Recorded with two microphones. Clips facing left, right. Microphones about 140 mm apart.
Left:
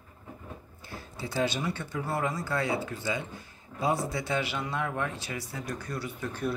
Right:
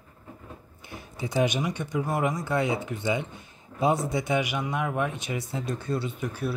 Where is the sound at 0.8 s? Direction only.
20° right (ahead or behind).